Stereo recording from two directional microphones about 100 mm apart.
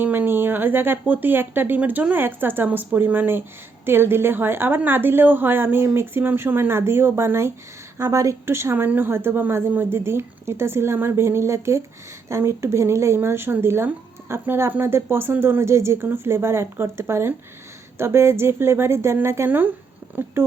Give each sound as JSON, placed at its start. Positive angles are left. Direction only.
{"t": 0.0, "sound": "speech", "side_deg": -20}